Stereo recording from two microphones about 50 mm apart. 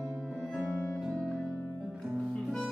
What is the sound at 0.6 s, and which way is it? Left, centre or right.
Music, left.